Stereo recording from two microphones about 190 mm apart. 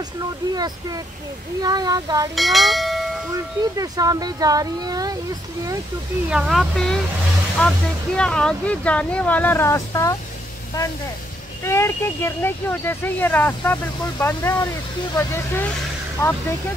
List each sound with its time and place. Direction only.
1.6 s speech: 20° right (ahead or behind)
2.3 s speech: centre (ahead or behind)
3.7 s speech: 20° right (ahead or behind)
6.3 s a woman's voice: centre (ahead or behind); by 10.1 s 15° left (ahead or behind)
11.6 s speech: 15° left (ahead or behind)